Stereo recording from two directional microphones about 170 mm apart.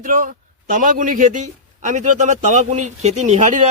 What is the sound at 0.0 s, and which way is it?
A man's voice, 50° right (ahead or behind).